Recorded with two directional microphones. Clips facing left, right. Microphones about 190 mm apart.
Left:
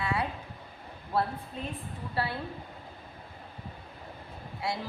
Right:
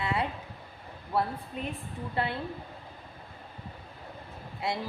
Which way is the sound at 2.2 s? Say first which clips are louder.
Right 1 dB; 20° right (ahead or behind).